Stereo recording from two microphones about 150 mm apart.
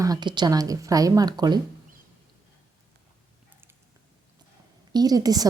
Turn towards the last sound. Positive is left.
turn(degrees=-25)  # may be behind; listen again after turning